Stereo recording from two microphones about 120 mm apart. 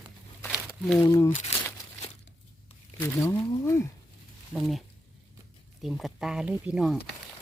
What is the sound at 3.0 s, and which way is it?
Speech, 20° left (ahead or behind).